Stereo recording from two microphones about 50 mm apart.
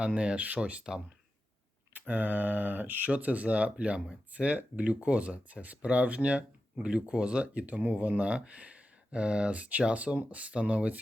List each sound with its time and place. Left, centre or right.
0.0 s speech: right
1.9 s speech: right